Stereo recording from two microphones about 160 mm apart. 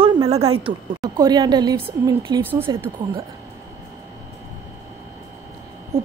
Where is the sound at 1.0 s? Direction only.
25° right (ahead or behind).